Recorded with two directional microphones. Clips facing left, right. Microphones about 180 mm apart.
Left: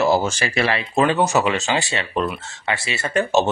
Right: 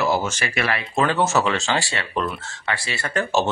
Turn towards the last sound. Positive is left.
turn(degrees=20)  # may be behind; listen again after turning